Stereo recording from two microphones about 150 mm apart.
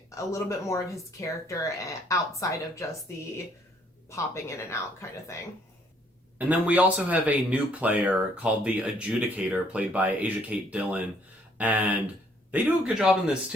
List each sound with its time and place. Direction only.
0.1 s speech: 20° left (ahead or behind)
4.1 s speech: 20° left (ahead or behind)
6.5 s speech: 10° right (ahead or behind)